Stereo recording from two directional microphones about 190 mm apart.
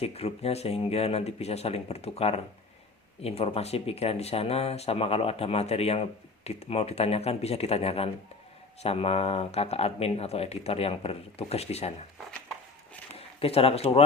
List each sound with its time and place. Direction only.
0.0 s speech: 30° left (ahead or behind)
13.1 s speech: 30° left (ahead or behind)